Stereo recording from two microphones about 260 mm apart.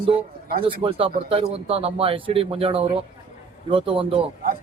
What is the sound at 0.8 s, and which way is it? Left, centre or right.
Speech, right.